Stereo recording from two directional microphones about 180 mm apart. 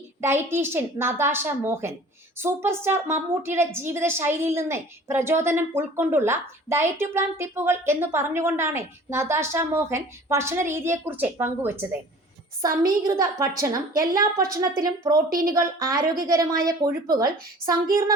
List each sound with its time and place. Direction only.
0.2 s a woman's voice: 15° right (ahead or behind)